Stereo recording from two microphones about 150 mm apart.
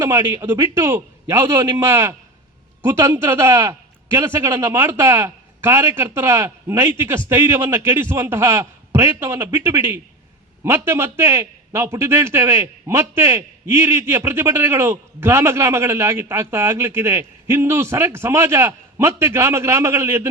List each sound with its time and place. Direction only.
0.0 s a man's voice: 20° right (ahead or behind)